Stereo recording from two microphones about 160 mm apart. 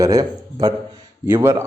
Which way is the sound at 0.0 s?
20° right (ahead or behind).